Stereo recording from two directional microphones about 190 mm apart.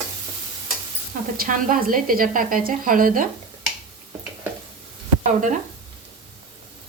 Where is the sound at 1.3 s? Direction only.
45° right (ahead or behind).